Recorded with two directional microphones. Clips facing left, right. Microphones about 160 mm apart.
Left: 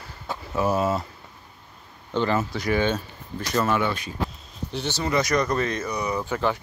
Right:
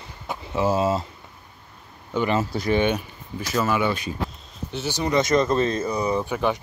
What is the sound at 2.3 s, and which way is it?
Speech, 25° right (ahead or behind).